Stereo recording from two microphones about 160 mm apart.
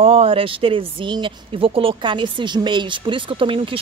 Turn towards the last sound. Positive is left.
turn(degrees=-35)  # may be behind; listen again after turning